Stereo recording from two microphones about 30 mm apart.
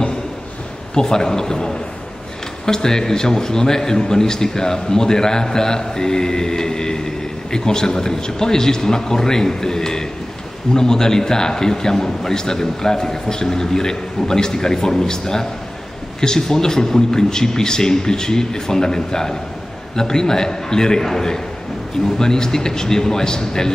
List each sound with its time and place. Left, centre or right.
0.9 s a man's voice: left